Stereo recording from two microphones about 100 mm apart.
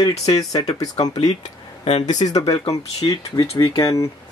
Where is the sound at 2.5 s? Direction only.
90° left.